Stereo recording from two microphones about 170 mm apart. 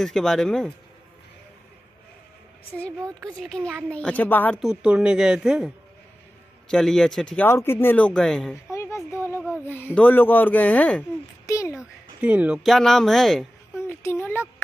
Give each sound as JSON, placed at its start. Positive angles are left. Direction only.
{"t": 0.0, "sound": "speech", "side_deg": 0}
{"t": 3.3, "sound": "speech", "side_deg": 5}
{"t": 4.6, "sound": "speech", "side_deg": -5}
{"t": 6.7, "sound": "speech", "side_deg": 5}
{"t": 8.6, "sound": "a sound", "side_deg": 15}
{"t": 9.7, "sound": "speech", "side_deg": 10}
{"t": 11.4, "sound": "a sound", "side_deg": 20}
{"t": 11.7, "sound": "speech", "side_deg": -5}
{"t": 13.8, "sound": "a sound", "side_deg": 15}